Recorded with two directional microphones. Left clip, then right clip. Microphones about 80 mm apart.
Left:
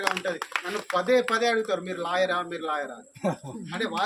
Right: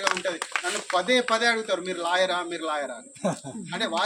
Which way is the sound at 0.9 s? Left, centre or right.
Left.